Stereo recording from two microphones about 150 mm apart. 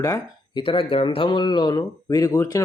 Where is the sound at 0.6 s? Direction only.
35° left (ahead or behind).